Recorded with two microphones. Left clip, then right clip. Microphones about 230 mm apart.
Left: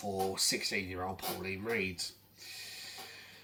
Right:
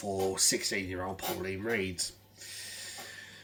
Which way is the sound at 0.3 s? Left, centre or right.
Centre.